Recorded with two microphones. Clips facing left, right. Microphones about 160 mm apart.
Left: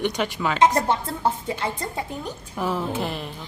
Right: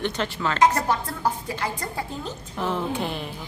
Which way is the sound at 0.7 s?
25° left (ahead or behind).